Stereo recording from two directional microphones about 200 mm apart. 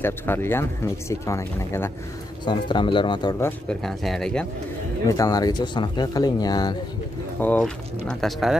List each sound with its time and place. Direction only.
0.0 s speech: 10° left (ahead or behind)
3.8 s speech: centre (ahead or behind)
5.0 s speech: 15° left (ahead or behind)
7.3 s speech: 5° left (ahead or behind)